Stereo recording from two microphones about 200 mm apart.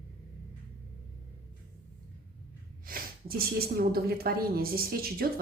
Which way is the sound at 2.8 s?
45° right (ahead or behind).